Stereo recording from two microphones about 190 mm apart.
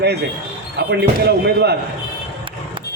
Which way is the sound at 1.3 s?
60° right (ahead or behind).